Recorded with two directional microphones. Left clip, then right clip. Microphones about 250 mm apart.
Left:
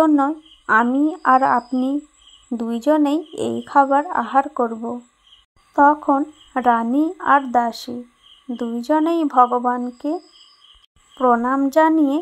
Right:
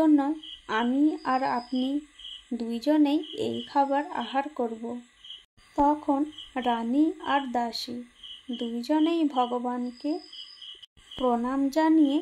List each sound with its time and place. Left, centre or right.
0.0 s a woman's voice: centre
11.1 s a woman's voice: left